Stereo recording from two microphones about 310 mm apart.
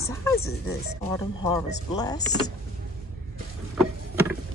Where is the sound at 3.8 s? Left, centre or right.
Centre.